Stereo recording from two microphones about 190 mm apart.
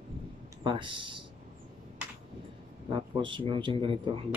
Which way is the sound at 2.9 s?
25° right (ahead or behind).